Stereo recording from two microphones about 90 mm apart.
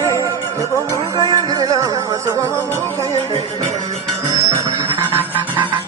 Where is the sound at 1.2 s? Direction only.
55° right (ahead or behind); by 2.2 s 40° right (ahead or behind).